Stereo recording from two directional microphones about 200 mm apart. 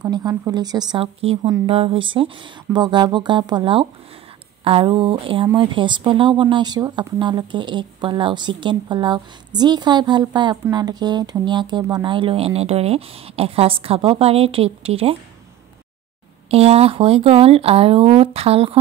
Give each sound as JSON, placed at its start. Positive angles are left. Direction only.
{"t": 0.0, "sound": "speech", "side_deg": -20}
{"t": 16.4, "sound": "speech", "side_deg": -30}